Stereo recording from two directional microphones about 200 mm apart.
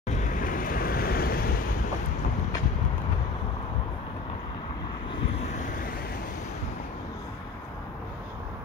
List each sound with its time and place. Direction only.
0.1 s vehicle: 40° left (ahead or behind)
5.4 s vehicle: 40° left (ahead or behind)